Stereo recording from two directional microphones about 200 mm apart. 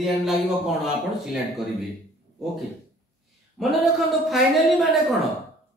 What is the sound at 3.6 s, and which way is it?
Speech, centre (ahead or behind).